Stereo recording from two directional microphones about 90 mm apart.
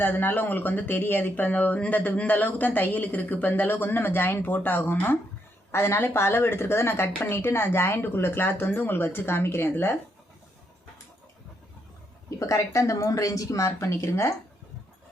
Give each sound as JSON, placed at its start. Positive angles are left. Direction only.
{"t": 0.0, "sound": "speech", "side_deg": 20}
{"t": 12.4, "sound": "speech", "side_deg": 35}